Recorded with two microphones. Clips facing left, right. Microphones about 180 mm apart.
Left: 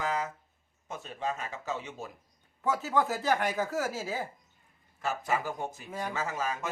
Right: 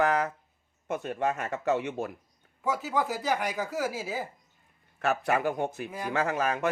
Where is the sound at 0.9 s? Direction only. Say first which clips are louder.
Right 6 dB; 65° right (ahead or behind).